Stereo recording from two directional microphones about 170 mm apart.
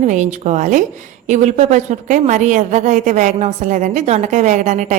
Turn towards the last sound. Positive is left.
turn(degrees=-45)  # may be behind; listen again after turning